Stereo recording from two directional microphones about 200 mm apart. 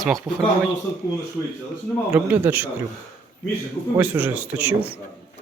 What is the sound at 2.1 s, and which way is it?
Speech, 10° right (ahead or behind).